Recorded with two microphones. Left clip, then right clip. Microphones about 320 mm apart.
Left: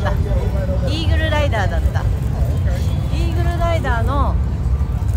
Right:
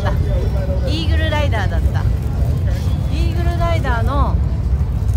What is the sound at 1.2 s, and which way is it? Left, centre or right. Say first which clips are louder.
Speech: left 2 dB; centre.